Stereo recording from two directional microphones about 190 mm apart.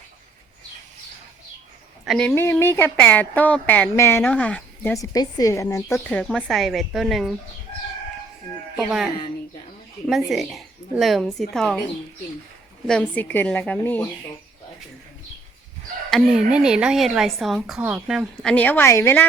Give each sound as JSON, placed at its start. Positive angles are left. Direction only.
{"t": 2.0, "sound": "a woman's voice", "side_deg": 5}
{"t": 10.1, "sound": "speech", "side_deg": 0}
{"t": 12.9, "sound": "a woman's voice", "side_deg": 10}
{"t": 16.0, "sound": "speech", "side_deg": 0}
{"t": 18.4, "sound": "a woman's voice", "side_deg": 10}